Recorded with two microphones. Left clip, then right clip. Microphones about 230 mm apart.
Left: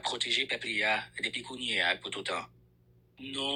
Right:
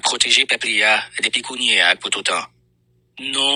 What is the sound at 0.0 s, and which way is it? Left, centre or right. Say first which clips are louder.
Speech: right 15 dB; right.